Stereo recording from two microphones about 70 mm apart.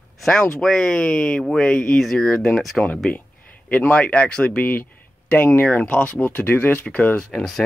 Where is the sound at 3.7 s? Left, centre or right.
Centre.